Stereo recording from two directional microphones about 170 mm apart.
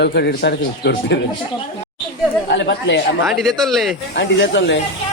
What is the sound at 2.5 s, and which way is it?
Speech, 90° left.